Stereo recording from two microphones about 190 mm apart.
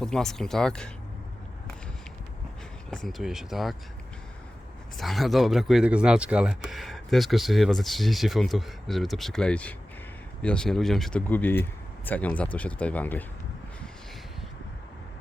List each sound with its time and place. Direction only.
0.0 s speech: centre (ahead or behind)
2.9 s speech: centre (ahead or behind)
4.9 s speech: centre (ahead or behind)